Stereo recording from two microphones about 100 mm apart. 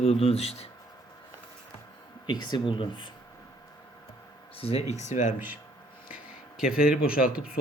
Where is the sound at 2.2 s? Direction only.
45° left (ahead or behind).